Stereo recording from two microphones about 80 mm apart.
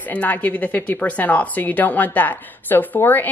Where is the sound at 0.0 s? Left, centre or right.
Centre.